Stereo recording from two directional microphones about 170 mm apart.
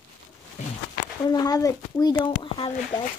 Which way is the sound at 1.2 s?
20° left (ahead or behind).